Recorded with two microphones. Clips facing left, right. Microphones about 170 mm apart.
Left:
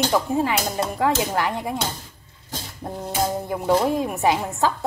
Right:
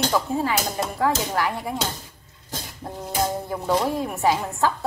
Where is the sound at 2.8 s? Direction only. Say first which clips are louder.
Left 1 dB; 25° left (ahead or behind).